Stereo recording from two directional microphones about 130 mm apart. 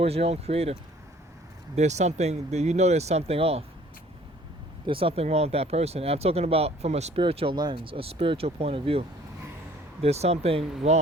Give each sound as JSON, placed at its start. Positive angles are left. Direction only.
{"t": 0.0, "sound": "speech", "side_deg": -50}
{"t": 4.9, "sound": "speech", "side_deg": -45}
{"t": 7.2, "sound": "speech", "side_deg": -45}